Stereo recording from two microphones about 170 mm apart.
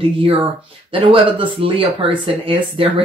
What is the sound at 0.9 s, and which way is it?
Speech, 30° right (ahead or behind).